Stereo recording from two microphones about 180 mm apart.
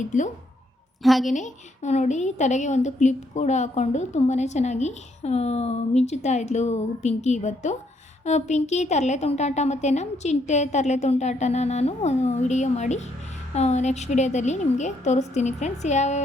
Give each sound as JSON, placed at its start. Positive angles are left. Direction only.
{"t": 1.0, "sound": "a woman's voice", "side_deg": 0}
{"t": 1.3, "sound": "a woman's voice", "side_deg": 45}